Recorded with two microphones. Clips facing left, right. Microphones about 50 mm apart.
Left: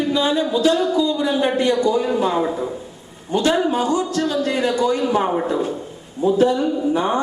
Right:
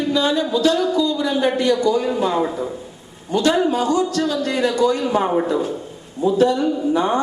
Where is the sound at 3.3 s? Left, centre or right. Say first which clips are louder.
Right 1 dB; left.